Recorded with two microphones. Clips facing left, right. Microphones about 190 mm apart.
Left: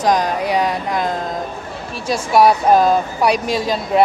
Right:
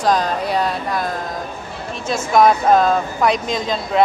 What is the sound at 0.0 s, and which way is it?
Speech, 15° left (ahead or behind).